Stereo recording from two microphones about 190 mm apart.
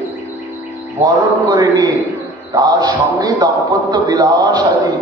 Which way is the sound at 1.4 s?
20° right (ahead or behind).